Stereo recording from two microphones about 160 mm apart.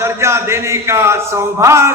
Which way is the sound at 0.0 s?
15° right (ahead or behind).